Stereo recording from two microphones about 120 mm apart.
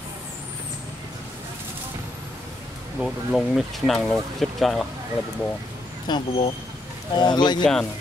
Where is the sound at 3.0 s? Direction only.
Centre (ahead or behind).